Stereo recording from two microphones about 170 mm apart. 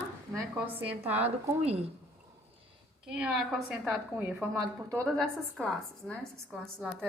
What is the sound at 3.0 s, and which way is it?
Speech, 5° right (ahead or behind).